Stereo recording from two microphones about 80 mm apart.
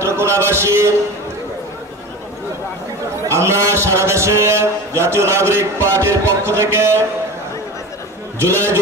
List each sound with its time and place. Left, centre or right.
0.0 s a man's voice: right
3.3 s a man's voice: right
8.4 s a man's voice: right